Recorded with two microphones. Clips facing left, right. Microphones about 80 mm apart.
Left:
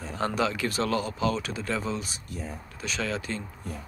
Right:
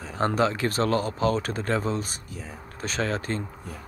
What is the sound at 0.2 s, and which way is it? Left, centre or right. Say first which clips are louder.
Speech: right 4 dB; right.